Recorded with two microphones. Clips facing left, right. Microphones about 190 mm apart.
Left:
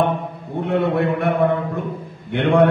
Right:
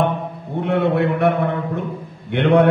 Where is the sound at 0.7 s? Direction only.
70° right (ahead or behind).